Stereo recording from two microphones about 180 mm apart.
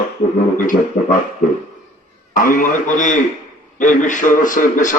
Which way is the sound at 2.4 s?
45° left (ahead or behind).